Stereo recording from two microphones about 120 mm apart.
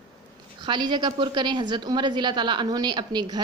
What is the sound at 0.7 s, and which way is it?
A woman's voice, 40° right (ahead or behind).